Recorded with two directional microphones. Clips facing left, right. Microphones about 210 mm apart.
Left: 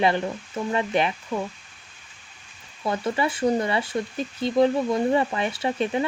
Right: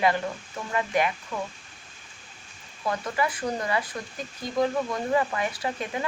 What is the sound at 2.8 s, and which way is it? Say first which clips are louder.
Speech: left 3 dB; 25° left (ahead or behind).